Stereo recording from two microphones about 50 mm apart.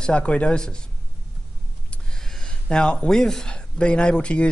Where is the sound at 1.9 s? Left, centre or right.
Centre.